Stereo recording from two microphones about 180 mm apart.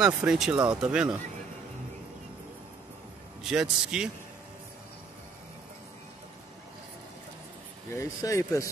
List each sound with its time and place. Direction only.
0.0 s a man's voice: 5° right (ahead or behind)
3.4 s a man's voice: 5° right (ahead or behind)
7.9 s speech: 15° left (ahead or behind)